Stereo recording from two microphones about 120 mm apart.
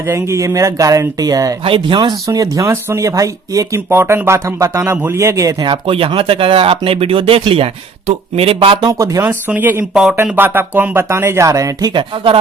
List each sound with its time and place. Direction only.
0.1 s speech: 25° right (ahead or behind)
1.6 s speech: 45° right (ahead or behind); by 5.5 s 25° right (ahead or behind)
5.6 s speech: 45° right (ahead or behind)
8.9 s speech: 25° right (ahead or behind)
9.5 s speech: 15° right (ahead or behind)
9.9 s speech: 5° right (ahead or behind)
10.2 s speech: 15° right (ahead or behind)
11.9 s speech: 45° right (ahead or behind)